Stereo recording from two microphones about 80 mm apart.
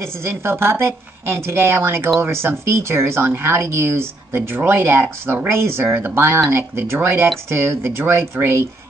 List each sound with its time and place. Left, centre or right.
0.0 s speech: right